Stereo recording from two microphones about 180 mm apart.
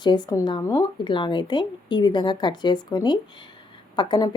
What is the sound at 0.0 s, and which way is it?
A woman's voice, 25° left (ahead or behind).